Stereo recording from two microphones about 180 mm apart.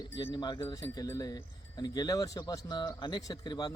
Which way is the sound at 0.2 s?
25° left (ahead or behind).